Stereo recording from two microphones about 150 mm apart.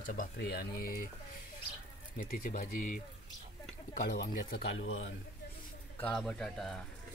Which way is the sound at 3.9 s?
80° left.